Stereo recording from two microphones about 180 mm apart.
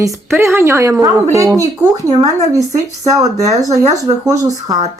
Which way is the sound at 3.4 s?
20° right (ahead or behind).